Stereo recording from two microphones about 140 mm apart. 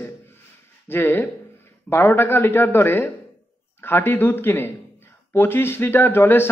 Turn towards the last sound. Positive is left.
turn(degrees=15)  # may be behind; listen again after turning